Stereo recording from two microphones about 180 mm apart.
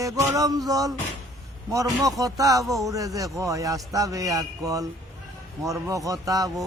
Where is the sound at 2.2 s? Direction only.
20° right (ahead or behind).